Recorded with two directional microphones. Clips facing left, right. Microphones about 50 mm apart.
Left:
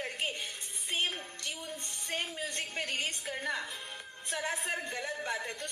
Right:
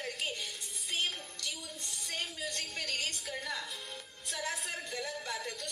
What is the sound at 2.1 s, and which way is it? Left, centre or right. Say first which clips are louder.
A woman's voice: left 3 dB; left.